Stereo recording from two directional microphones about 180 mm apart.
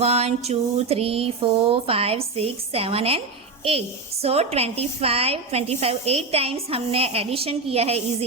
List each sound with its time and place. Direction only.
0.0 s a woman's voice: 35° right (ahead or behind)